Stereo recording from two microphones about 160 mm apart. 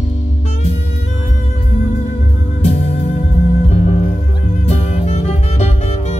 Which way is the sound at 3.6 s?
40° left (ahead or behind).